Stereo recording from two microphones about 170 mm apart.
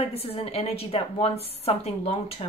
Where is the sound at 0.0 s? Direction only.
35° left (ahead or behind).